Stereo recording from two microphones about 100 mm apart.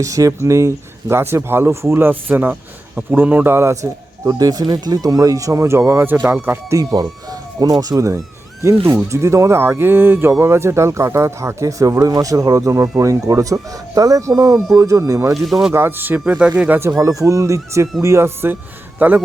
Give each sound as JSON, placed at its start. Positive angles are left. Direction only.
{"t": 0.0, "sound": "speech", "side_deg": -35}
{"t": 4.3, "sound": "speech", "side_deg": -40}
{"t": 6.2, "sound": "speech", "side_deg": -20}
{"t": 6.7, "sound": "speech", "side_deg": -40}
{"t": 15.4, "sound": "speech", "side_deg": 0}
{"t": 15.7, "sound": "speech", "side_deg": -20}
{"t": 17.0, "sound": "speech", "side_deg": -35}
{"t": 18.9, "sound": "a man's voice", "side_deg": -15}